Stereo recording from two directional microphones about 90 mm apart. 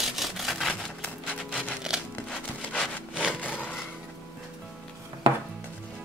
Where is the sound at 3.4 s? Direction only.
20° left (ahead or behind).